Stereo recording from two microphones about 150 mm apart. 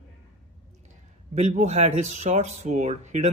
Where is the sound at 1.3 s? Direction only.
50° right (ahead or behind).